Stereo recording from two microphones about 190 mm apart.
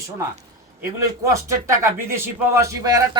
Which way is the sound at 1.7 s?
15° right (ahead or behind).